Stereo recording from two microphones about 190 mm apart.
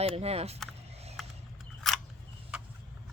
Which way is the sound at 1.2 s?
Centre (ahead or behind).